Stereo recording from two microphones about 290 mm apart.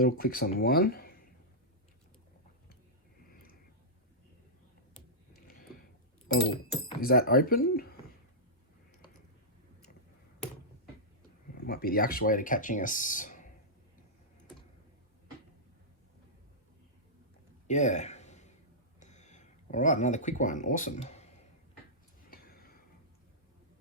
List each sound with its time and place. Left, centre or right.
0.0 s speech: left
6.2 s speech: left
11.6 s speech: left
17.7 s a sound: left
18.9 s speech: left
22.3 s a sound: left